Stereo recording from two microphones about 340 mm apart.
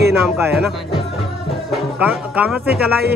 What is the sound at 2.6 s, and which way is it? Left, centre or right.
Music, right.